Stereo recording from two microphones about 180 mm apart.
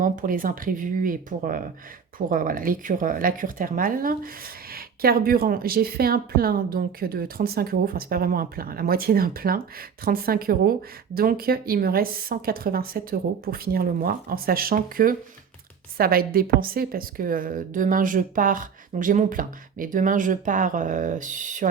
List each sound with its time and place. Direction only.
0.0 s a woman's voice: 50° right (ahead or behind)